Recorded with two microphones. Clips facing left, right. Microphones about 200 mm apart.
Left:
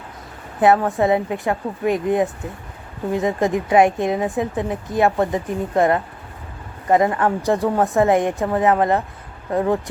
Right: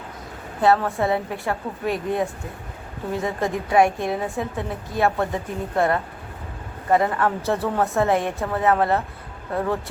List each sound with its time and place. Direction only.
0.6 s a woman's voice: 15° left (ahead or behind)